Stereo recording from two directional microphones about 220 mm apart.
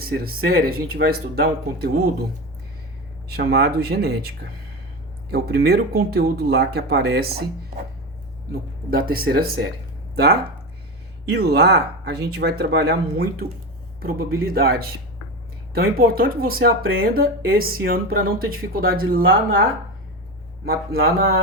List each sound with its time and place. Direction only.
0.0 s speech: 40° right (ahead or behind)
3.2 s speech: 45° right (ahead or behind)
5.3 s speech: 45° right (ahead or behind)
8.9 s speech: 45° right (ahead or behind)
11.3 s speech: 45° right (ahead or behind)
19.2 s speech: 65° right (ahead or behind)
20.7 s speech: 45° right (ahead or behind)